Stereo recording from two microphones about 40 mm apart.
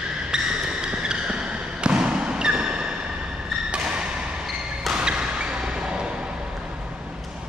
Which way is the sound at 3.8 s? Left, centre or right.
Right.